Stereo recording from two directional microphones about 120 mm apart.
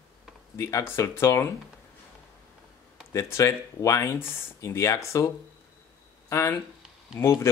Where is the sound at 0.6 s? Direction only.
25° left (ahead or behind).